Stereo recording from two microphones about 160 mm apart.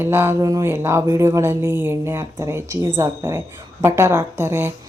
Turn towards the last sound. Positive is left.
turn(degrees=-15)  # may be behind; listen again after turning